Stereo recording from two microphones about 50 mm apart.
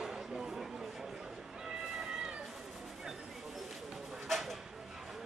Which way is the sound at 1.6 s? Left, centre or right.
Centre.